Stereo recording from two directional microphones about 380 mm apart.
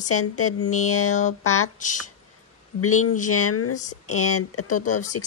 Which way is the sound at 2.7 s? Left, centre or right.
Left.